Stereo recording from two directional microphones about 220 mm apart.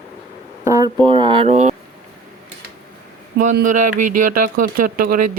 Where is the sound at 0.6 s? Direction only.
15° right (ahead or behind); by 1.7 s 30° right (ahead or behind).